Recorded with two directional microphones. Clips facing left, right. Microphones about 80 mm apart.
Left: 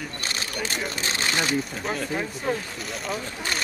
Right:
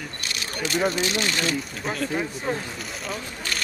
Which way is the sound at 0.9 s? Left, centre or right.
Left.